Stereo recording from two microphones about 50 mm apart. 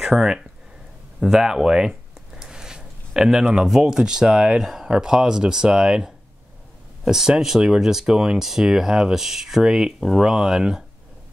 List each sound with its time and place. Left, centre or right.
0.0 s speech: centre